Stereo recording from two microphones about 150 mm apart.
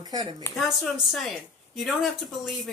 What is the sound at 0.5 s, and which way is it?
Speech, centre (ahead or behind).